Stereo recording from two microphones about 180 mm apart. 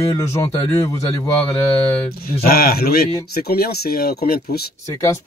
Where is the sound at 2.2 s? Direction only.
55° left (ahead or behind).